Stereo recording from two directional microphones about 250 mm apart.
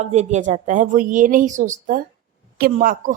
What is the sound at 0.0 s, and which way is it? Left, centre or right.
A woman's voice, right.